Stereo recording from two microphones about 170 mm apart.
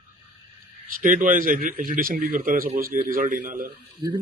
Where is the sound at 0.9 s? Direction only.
50° right (ahead or behind).